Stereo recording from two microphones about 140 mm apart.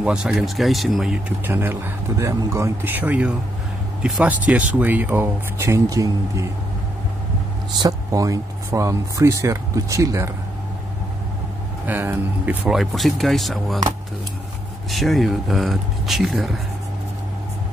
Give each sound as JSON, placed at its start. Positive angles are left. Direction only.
{"t": 0.0, "sound": "speech", "side_deg": -5}
{"t": 1.4, "sound": "speech", "side_deg": -15}
{"t": 7.8, "sound": "speech", "side_deg": -25}
{"t": 11.8, "sound": "speech", "side_deg": -15}
{"t": 12.6, "sound": "speech", "side_deg": 0}
{"t": 14.9, "sound": "speech", "side_deg": 0}